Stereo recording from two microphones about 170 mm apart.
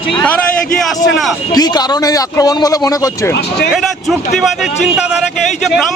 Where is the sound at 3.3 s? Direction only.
75° left (ahead or behind).